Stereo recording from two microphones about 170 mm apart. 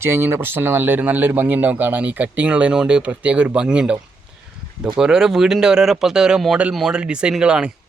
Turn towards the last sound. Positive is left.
turn(degrees=-5)  # may be behind; listen again after turning